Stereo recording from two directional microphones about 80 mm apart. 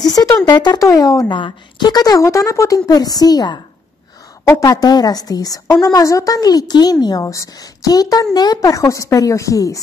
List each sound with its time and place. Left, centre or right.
0.0 s a sound: left
0.5 s speech: left
0.7 s a woman's voice: left
1.3 s a woman's voice: left
2.1 s a woman's voice: left
2.9 s a woman's voice: left
4.5 s a woman's voice: left